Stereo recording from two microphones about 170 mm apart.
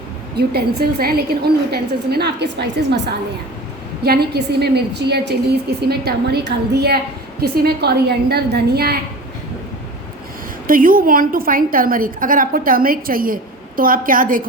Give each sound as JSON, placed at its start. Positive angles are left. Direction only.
{"t": 0.3, "sound": "a woman's voice", "side_deg": -70}
{"t": 4.0, "sound": "a woman's voice", "side_deg": -65}
{"t": 10.7, "sound": "a woman's voice", "side_deg": -55}